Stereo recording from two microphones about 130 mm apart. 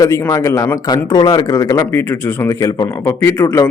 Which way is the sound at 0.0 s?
25° left (ahead or behind).